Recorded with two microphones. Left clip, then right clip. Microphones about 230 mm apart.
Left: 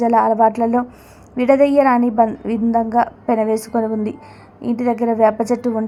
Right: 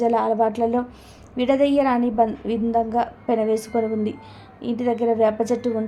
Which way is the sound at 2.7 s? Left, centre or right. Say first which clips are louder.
Left 3 dB; centre.